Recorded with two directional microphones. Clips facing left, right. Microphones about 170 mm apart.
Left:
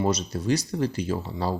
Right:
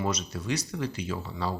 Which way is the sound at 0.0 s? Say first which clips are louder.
Left 6 dB; 35° left (ahead or behind).